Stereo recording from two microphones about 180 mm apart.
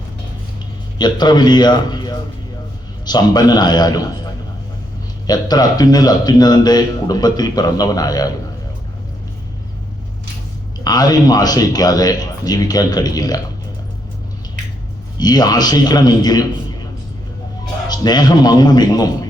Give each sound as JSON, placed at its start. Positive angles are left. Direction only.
{"t": 0.9, "sound": "a man's voice", "side_deg": 25}
{"t": 5.2, "sound": "a man's voice", "side_deg": 20}
{"t": 10.8, "sound": "a man's voice", "side_deg": 20}
{"t": 15.2, "sound": "a man's voice", "side_deg": 20}
{"t": 17.8, "sound": "a man's voice", "side_deg": 25}